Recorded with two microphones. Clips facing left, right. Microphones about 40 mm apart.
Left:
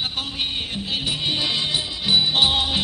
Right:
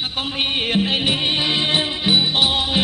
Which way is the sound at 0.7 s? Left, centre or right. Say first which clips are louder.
Right 9 dB; right.